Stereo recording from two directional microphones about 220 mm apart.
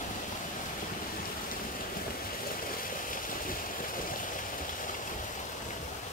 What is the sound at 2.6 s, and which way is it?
Vehicle, 40° left (ahead or behind).